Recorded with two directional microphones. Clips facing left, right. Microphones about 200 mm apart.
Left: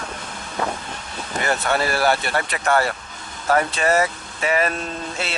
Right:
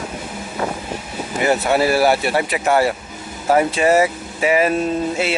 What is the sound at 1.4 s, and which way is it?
Speech, 5° right (ahead or behind).